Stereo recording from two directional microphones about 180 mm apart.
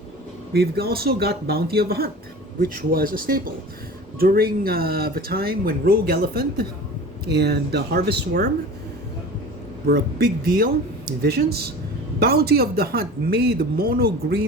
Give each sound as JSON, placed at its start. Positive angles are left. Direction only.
{"t": 0.5, "sound": "speech", "side_deg": -60}
{"t": 9.8, "sound": "speech", "side_deg": -60}